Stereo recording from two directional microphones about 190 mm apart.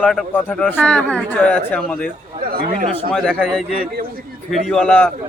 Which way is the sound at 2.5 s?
50° right (ahead or behind).